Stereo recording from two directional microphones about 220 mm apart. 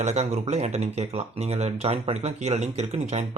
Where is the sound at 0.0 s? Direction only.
30° right (ahead or behind).